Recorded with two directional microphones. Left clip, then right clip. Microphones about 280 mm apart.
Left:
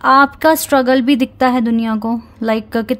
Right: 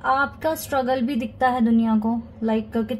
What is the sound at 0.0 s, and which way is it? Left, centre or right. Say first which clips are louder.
A woman's voice: left 11 dB; left.